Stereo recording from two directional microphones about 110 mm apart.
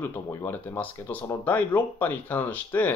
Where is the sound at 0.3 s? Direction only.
30° left (ahead or behind).